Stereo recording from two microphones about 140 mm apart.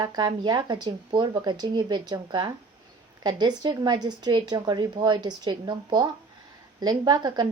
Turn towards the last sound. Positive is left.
turn(degrees=-30)  # may be behind; listen again after turning